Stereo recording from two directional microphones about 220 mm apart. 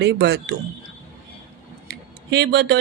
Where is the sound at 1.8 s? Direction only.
50° right (ahead or behind).